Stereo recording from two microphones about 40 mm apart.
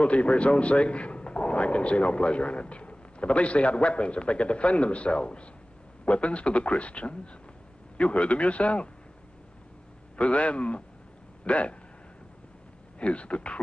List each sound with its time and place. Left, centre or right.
0.0 s a man's voice: left
10.1 s a man's voice: left
13.0 s speech: left